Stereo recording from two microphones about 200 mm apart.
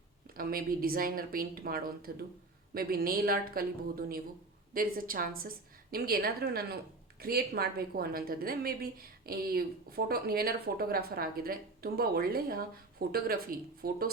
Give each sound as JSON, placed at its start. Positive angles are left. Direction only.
{"t": 0.3, "sound": "a woman's voice", "side_deg": -45}
{"t": 4.7, "sound": "a woman's voice", "side_deg": -45}